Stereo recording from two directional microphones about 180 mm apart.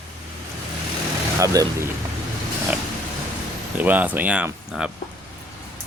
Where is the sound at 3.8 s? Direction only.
10° right (ahead or behind).